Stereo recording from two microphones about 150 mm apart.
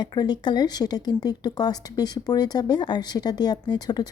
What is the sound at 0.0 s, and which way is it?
Speech, 30° left (ahead or behind).